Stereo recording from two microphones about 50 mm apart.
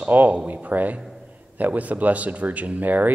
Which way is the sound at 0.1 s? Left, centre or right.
Right.